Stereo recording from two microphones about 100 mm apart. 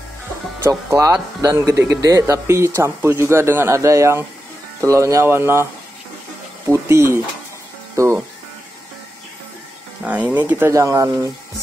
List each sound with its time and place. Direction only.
0.7 s speech: 30° right (ahead or behind)
10.0 s speech: 15° right (ahead or behind)
10.7 s speech: 30° right (ahead or behind)